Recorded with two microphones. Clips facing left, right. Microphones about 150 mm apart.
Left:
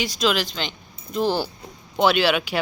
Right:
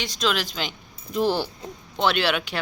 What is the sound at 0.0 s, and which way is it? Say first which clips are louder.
Speech: left 3 dB; 5° left (ahead or behind).